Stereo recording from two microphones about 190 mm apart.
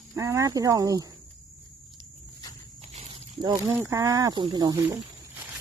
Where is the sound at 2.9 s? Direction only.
35° right (ahead or behind).